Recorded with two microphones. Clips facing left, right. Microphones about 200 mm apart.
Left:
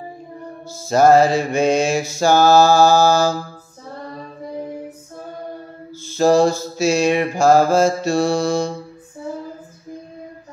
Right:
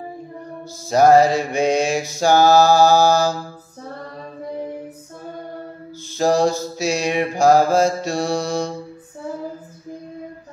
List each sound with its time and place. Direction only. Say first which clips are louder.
0.8 s mantra: even; 15° right (ahead or behind)
6.0 s mantra: left 3 dB; 15° right (ahead or behind)